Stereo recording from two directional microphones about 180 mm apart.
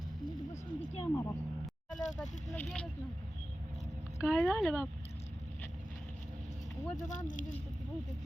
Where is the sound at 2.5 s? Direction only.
10° left (ahead or behind).